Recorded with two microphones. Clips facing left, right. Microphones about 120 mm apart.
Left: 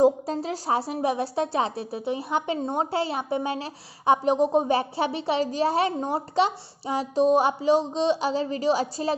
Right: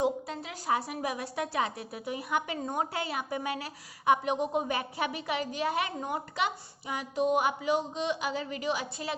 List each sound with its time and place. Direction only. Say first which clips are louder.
0.0 s a woman's voice: left 9 dB; 35° left (ahead or behind)